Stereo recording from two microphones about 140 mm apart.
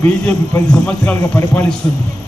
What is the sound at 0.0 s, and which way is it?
A man's voice, 10° left (ahead or behind).